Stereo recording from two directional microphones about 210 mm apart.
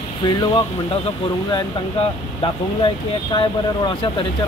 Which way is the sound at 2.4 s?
20° left (ahead or behind).